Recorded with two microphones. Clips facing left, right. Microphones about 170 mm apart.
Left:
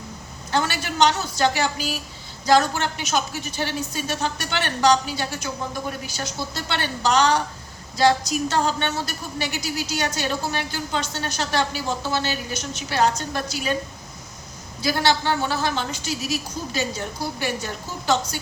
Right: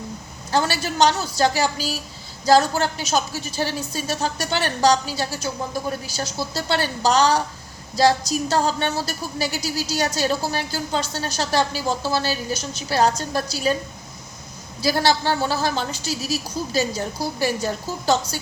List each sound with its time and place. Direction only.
0.5 s a woman's voice: 35° right (ahead or behind)
14.8 s a woman's voice: 35° right (ahead or behind)